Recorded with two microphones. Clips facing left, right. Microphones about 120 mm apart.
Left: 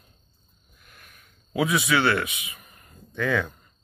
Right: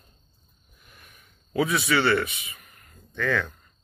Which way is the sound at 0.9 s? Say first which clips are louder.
Even; centre (ahead or behind).